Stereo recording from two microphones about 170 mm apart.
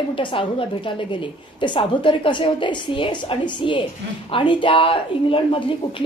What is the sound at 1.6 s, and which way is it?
A woman's voice, 30° left (ahead or behind).